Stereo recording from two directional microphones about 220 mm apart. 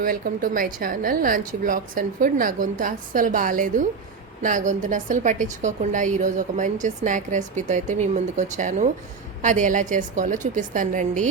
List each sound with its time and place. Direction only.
0.0 s a woman's voice: 40° right (ahead or behind)